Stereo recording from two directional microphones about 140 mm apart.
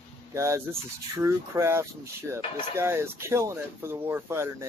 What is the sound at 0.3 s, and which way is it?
Speech, 20° right (ahead or behind).